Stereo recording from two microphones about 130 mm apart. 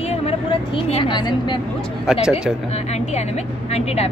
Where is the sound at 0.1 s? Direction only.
45° left (ahead or behind).